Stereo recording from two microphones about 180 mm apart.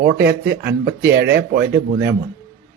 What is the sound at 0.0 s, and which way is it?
Speech, 65° right (ahead or behind).